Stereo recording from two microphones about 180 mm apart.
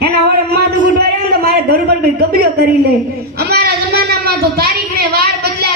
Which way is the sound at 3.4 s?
60° right (ahead or behind).